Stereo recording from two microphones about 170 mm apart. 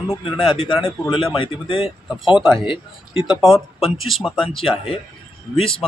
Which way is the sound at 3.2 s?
5° right (ahead or behind).